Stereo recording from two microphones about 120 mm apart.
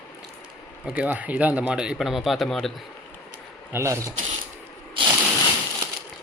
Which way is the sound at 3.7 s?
25° right (ahead or behind).